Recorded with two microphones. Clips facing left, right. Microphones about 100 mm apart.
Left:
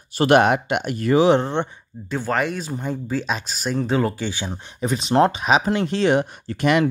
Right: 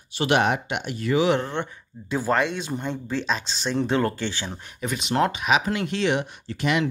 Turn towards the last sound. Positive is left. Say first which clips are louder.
# left 5 dB
turn(degrees=50)  # may be behind; listen again after turning